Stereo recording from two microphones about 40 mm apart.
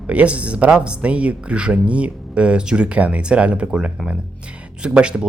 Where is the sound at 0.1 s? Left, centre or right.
Right.